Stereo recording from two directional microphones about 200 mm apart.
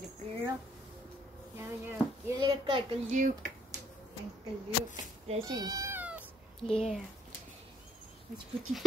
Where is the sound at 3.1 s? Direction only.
40° right (ahead or behind).